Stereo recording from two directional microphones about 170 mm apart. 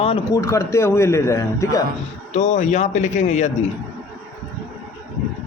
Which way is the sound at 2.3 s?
45° left (ahead or behind).